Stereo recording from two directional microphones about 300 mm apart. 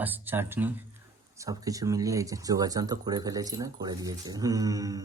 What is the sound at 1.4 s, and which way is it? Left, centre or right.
Speech, centre.